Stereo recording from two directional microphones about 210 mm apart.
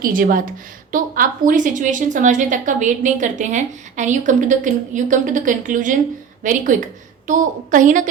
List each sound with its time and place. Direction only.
0.0 s a woman's voice: 40° right (ahead or behind)